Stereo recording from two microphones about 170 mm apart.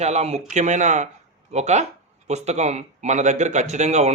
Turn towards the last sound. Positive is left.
turn(degrees=-40)  # may be behind; listen again after turning